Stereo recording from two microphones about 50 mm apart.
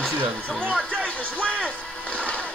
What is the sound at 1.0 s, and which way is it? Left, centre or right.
Music, left.